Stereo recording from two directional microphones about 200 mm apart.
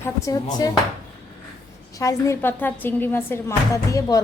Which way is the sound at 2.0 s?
15° left (ahead or behind).